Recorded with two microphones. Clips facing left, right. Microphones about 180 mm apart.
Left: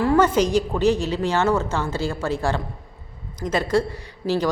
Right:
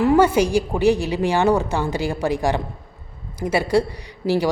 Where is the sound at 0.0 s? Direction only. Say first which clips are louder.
Right 2 dB; 15° right (ahead or behind).